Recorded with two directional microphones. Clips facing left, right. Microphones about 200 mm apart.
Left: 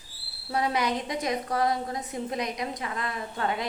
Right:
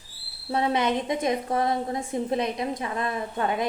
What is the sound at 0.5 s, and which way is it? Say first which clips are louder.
A woman's voice: right 3 dB; 25° right (ahead or behind).